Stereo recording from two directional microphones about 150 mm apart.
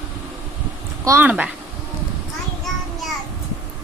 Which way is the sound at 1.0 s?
15° right (ahead or behind).